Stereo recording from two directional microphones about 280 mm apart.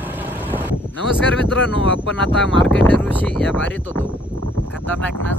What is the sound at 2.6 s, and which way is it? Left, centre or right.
Speech, centre.